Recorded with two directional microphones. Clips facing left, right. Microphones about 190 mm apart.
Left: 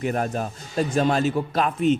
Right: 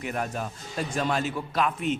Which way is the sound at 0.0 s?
40° left (ahead or behind).